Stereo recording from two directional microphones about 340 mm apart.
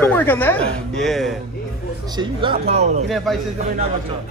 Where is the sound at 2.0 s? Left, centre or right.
Centre.